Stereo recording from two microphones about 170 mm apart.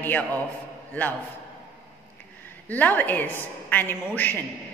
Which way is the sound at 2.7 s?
10° left (ahead or behind).